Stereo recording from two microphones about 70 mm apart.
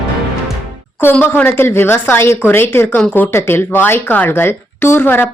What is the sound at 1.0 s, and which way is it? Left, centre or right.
Speech, left.